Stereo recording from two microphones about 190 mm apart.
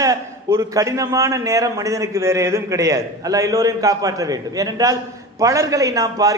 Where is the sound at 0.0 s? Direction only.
15° right (ahead or behind).